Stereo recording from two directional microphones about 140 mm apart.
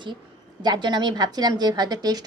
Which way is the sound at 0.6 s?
30° right (ahead or behind).